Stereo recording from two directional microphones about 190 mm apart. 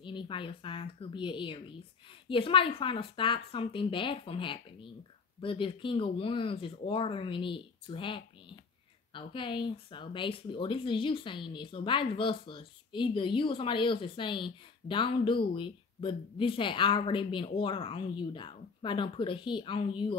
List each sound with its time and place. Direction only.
0.0 s speech: 25° left (ahead or behind)